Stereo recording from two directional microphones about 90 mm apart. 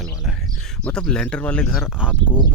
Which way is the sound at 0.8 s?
10° left (ahead or behind).